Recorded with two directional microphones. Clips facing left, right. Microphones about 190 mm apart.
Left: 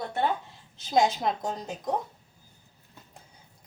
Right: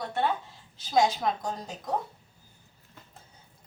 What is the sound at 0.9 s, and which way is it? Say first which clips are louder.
Speech: left 1 dB; 25° left (ahead or behind).